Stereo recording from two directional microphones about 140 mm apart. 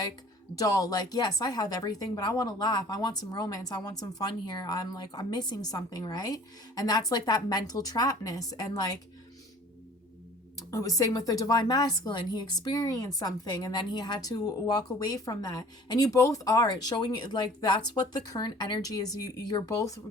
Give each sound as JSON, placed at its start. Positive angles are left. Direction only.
{"t": 0.6, "sound": "a woman's voice", "side_deg": 25}
{"t": 10.7, "sound": "a woman's voice", "side_deg": 25}